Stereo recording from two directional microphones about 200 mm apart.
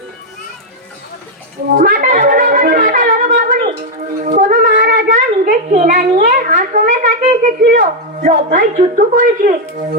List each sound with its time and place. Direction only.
1.7 s shofar: 40° right (ahead or behind)
4.2 s a sound: 40° right (ahead or behind)
7.6 s a woman's voice: 45° right (ahead or behind)